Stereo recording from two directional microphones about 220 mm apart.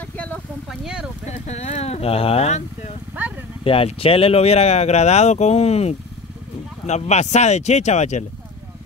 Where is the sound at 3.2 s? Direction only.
10° right (ahead or behind).